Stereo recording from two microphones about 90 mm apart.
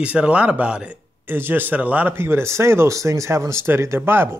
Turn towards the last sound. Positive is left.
turn(degrees=-25)  # may be behind; listen again after turning